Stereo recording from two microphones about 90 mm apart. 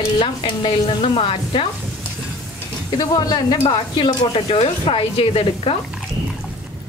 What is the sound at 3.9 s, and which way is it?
Speech, 60° left (ahead or behind).